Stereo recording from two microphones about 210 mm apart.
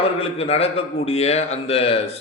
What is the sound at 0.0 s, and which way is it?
A man's voice, 30° left (ahead or behind).